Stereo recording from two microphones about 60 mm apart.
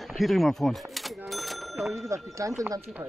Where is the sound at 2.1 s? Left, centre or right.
Right.